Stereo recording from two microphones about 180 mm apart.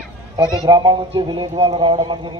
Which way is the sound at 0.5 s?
25° right (ahead or behind).